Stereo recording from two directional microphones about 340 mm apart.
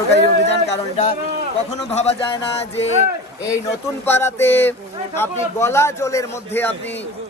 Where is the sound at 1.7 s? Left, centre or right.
Centre.